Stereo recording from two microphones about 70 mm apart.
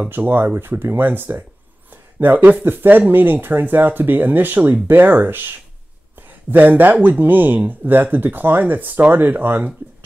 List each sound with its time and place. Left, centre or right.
0.1 s speech: right